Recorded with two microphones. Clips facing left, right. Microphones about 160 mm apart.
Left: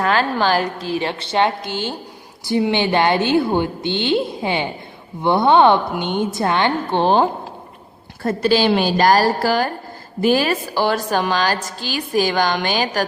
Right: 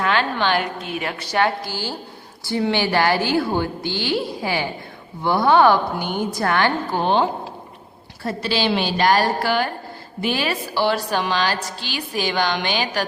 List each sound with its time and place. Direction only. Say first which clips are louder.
0.0 s a woman's voice: left 3 dB; 40° left (ahead or behind); by 7.0 s 20° left (ahead or behind)
7.0 s a woman's voice: left 3 dB; 40° left (ahead or behind)